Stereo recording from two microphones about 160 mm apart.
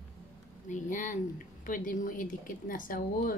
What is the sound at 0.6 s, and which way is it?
Speech, 55° left (ahead or behind).